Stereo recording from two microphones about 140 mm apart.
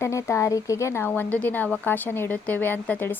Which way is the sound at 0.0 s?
20° left (ahead or behind).